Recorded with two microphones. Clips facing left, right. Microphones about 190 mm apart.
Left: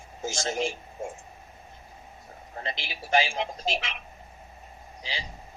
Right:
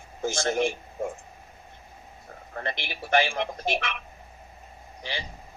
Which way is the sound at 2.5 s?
60° right (ahead or behind).